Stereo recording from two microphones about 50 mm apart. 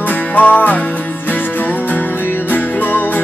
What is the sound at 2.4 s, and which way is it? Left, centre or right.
Music, left.